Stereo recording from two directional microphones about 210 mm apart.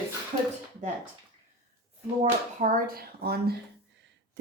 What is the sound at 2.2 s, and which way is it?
Speech, 40° right (ahead or behind).